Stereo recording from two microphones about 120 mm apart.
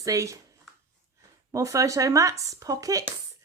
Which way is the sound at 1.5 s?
25° right (ahead or behind).